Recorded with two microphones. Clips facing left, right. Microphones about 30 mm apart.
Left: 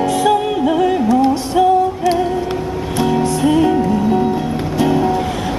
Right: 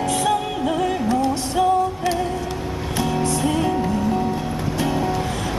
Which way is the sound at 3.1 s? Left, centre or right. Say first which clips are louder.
Left 7 dB; centre.